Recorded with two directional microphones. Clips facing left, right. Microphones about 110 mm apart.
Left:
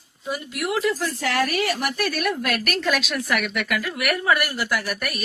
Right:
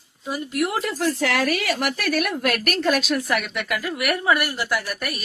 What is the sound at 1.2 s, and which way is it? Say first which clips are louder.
A woman's voice: even; 90° right.